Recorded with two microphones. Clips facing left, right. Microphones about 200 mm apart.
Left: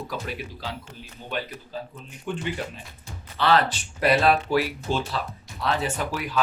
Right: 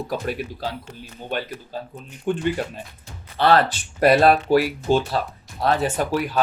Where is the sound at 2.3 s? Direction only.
50° right (ahead or behind).